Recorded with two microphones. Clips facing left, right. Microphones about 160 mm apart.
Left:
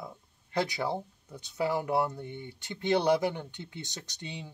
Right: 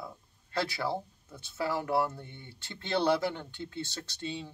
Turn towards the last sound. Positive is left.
turn(degrees=15)  # may be behind; listen again after turning